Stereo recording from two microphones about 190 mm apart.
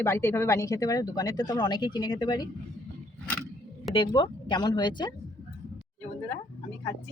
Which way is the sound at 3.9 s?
25° left (ahead or behind).